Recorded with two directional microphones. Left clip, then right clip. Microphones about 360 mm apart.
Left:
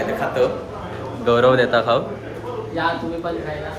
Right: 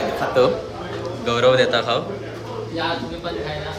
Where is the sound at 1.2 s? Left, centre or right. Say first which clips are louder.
Left 1 dB; centre.